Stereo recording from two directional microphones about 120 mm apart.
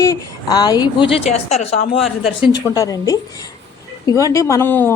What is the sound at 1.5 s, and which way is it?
Speech, 65° left (ahead or behind).